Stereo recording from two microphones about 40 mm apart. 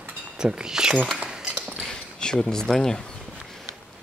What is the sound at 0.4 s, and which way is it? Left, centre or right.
Speech, centre.